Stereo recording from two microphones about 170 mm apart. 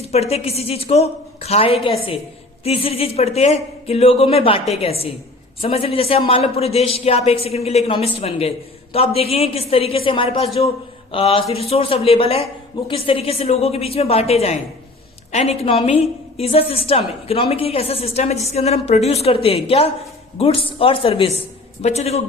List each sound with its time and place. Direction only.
0.1 s a woman's voice: 40° left (ahead or behind)